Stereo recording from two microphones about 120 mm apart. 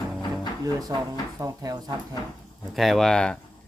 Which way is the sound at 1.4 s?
30° right (ahead or behind).